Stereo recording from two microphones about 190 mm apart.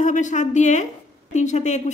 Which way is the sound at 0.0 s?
40° left (ahead or behind).